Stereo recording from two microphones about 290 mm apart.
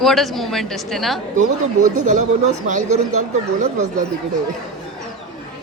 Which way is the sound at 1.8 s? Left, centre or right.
Right.